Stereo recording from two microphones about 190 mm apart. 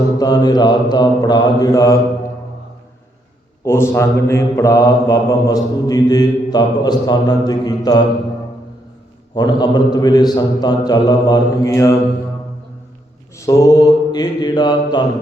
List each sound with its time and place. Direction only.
0.2 s mantra: 20° left (ahead or behind)
3.6 s mantra: 15° left (ahead or behind)
9.3 s mantra: 20° left (ahead or behind)
13.3 s mantra: 15° left (ahead or behind)